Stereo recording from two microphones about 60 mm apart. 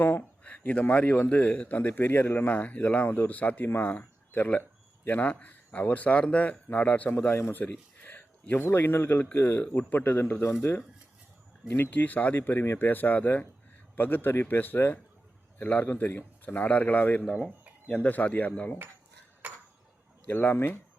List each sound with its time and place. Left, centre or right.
0.0 s speech: left
1.9 s a man's voice: left
7.2 s a man's voice: left
8.0 s a sound: left
8.6 s a man's voice: left
11.7 s a man's voice: left
19.4 s a sound: right
20.2 s a man's voice: left